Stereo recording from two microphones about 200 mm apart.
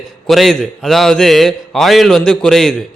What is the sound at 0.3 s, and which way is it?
Speech, centre (ahead or behind).